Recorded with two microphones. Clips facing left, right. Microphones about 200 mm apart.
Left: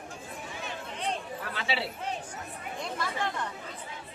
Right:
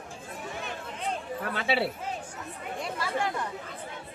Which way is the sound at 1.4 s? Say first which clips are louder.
Right 5 dB; 55° right (ahead or behind).